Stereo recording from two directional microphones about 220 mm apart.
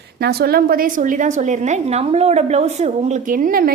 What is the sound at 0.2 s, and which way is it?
A woman's voice, 45° right (ahead or behind).